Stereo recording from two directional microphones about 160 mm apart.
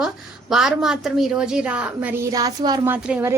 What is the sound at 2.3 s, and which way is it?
Speech, 25° right (ahead or behind).